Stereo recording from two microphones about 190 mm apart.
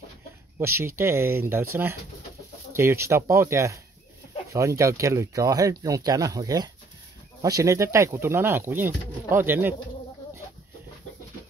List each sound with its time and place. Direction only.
0.6 s speech: 15° right (ahead or behind)